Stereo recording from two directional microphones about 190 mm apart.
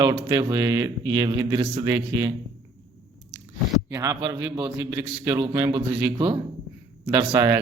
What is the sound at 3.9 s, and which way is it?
Speech, 15° right (ahead or behind).